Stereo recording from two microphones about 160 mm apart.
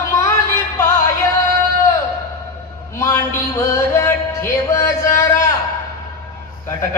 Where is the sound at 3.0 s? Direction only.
20° left (ahead or behind).